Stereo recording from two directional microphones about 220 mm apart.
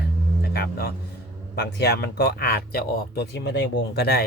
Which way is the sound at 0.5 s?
45° left (ahead or behind).